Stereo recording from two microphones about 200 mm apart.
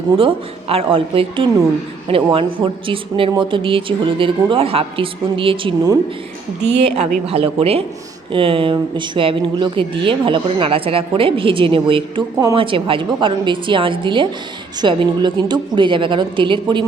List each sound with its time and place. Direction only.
0.2 s speech: 30° right (ahead or behind)